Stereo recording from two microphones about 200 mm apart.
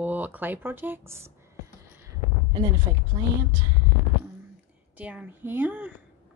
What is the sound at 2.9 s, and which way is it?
Speech, 20° right (ahead or behind).